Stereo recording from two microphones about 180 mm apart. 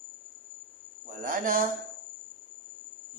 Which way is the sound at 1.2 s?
50° right (ahead or behind).